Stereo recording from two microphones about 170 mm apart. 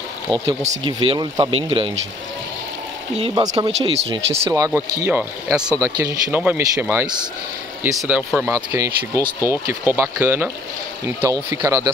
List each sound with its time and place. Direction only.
0.3 s speech: 30° right (ahead or behind)
3.2 s speech: 30° right (ahead or behind)
4.5 s speech: 20° right (ahead or behind)
8.5 s speech: 20° right (ahead or behind)